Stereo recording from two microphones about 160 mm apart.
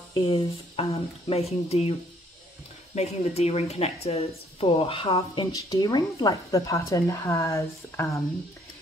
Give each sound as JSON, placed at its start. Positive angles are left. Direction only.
{"t": 0.1, "sound": "speech", "side_deg": 35}